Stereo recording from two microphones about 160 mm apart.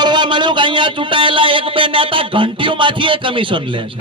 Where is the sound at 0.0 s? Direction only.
30° right (ahead or behind).